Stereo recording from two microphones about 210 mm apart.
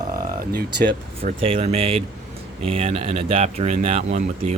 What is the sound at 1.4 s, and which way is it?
Speech, 25° right (ahead or behind).